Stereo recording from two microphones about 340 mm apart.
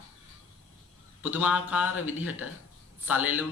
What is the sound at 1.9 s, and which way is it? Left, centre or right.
Speech, left.